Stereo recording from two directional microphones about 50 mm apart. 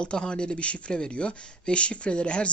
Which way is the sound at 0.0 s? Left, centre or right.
Centre.